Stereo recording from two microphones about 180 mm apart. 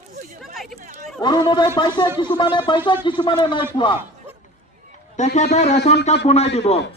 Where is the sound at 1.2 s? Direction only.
25° left (ahead or behind).